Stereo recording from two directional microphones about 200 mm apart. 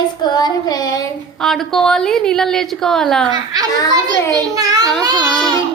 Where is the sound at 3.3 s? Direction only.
20° right (ahead or behind).